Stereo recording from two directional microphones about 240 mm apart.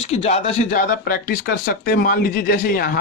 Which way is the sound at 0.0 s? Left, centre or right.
Left.